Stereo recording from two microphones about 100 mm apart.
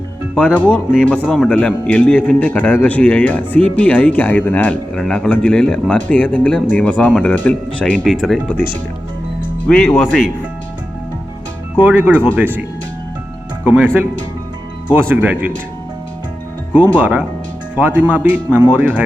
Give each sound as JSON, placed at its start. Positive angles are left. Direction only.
{"t": 0.3, "sound": "a man's voice", "side_deg": 15}
{"t": 8.4, "sound": "a man's voice", "side_deg": 20}
{"t": 11.8, "sound": "speech", "side_deg": -20}
{"t": 13.7, "sound": "speech", "side_deg": -20}
{"t": 17.0, "sound": "speech", "side_deg": -10}